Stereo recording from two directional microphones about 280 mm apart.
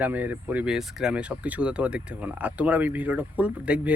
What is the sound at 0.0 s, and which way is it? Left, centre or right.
Speech, centre.